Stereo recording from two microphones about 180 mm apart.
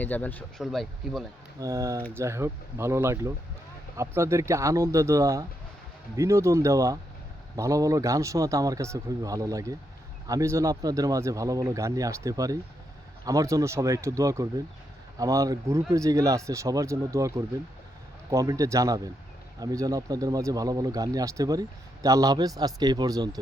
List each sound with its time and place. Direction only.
0.0 s speech: 10° left (ahead or behind)
0.6 s speech: centre (ahead or behind)
1.5 s a man's voice: 15° right (ahead or behind)